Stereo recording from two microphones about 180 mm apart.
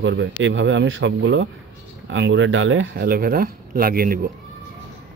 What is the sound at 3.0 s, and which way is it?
Speech, 55° right (ahead or behind).